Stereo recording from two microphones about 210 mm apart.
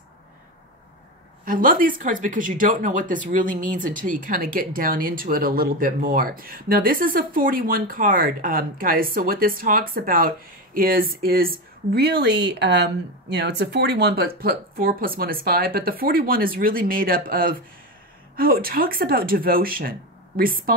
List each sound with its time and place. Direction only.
1.4 s speech: 40° right (ahead or behind)